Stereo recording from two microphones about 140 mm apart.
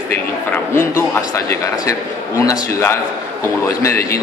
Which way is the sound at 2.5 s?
20° left (ahead or behind).